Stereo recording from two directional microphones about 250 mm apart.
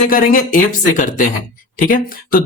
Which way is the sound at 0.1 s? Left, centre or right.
Left.